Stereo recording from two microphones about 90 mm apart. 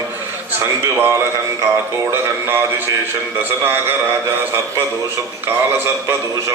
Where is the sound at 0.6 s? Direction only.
25° right (ahead or behind).